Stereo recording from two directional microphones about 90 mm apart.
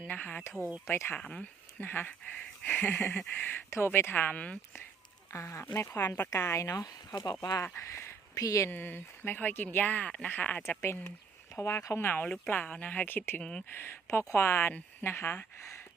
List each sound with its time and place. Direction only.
0.1 s speech: 15° left (ahead or behind)
1.2 s speech: 15° left (ahead or behind)
5.3 s speech: 30° left (ahead or behind)
8.7 s speech: 25° left (ahead or behind)
11.5 s speech: 30° left (ahead or behind)
11.9 s speech: 20° left (ahead or behind)
13.4 s speech: 10° left (ahead or behind)
13.7 s speech: 25° left (ahead or behind)